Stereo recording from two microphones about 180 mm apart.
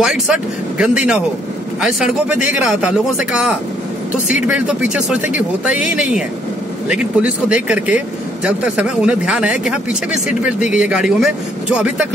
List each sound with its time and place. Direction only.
0.0 s speech: 5° right (ahead or behind)